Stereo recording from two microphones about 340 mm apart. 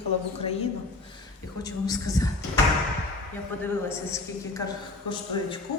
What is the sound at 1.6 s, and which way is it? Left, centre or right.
Speech, centre.